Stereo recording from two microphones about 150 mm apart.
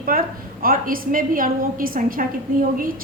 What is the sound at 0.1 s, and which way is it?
A woman's voice, 75° right (ahead or behind).